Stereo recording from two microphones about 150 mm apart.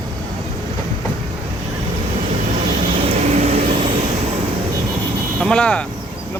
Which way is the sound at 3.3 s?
40° right (ahead or behind).